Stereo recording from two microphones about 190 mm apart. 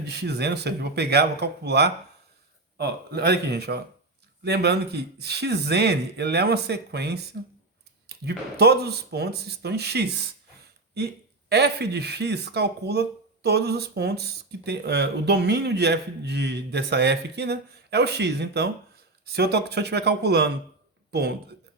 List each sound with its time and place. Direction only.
0.0 s speech: 60° right (ahead or behind)